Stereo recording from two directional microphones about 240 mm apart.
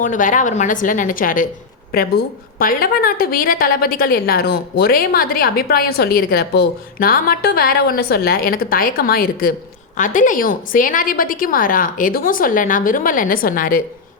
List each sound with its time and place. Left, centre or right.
0.0 s a woman's voice: left